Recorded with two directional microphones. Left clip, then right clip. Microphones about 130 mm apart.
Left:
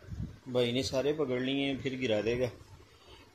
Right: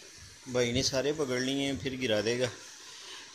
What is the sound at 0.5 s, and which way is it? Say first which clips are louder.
Speech: right 1 dB; 5° right (ahead or behind).